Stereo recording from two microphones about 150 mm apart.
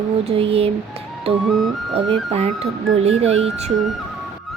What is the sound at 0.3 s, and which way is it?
Speech, 40° right (ahead or behind).